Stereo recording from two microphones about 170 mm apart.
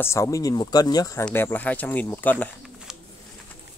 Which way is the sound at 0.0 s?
15° left (ahead or behind).